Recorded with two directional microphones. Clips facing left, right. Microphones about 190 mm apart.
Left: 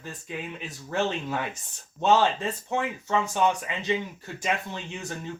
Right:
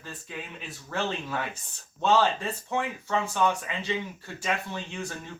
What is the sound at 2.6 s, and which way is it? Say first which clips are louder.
Speech: left 1 dB; 20° left (ahead or behind).